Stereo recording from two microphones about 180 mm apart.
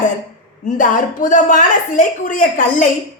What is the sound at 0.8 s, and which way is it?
A woman's voice, 45° left (ahead or behind).